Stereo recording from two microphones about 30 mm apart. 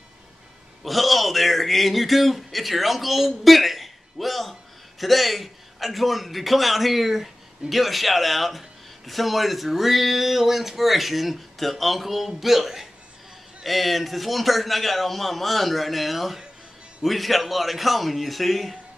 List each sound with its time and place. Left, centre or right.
0.8 s speech: centre